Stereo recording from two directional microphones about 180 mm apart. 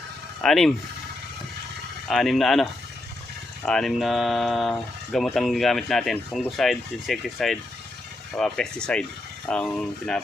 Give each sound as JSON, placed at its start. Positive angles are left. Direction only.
{"t": 0.4, "sound": "speech", "side_deg": 0}
{"t": 2.0, "sound": "speech", "side_deg": 0}
{"t": 3.7, "sound": "speech", "side_deg": 0}